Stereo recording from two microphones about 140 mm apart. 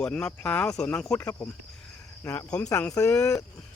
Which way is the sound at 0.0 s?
5° left (ahead or behind).